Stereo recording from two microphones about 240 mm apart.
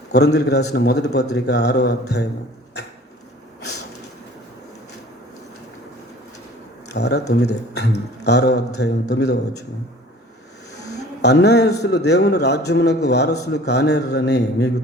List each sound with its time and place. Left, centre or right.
0.1 s a man's voice: left
6.8 s a man's voice: left
11.2 s a man's voice: left